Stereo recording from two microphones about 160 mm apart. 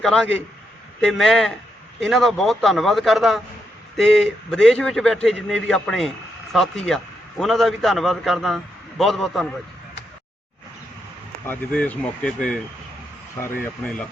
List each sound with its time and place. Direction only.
0.0 s a man's voice: 5° left (ahead or behind)
11.4 s speech: 10° left (ahead or behind)